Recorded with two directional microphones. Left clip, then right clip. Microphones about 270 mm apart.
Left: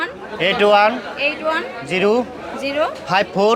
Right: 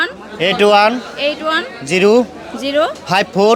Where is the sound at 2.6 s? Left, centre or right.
Right.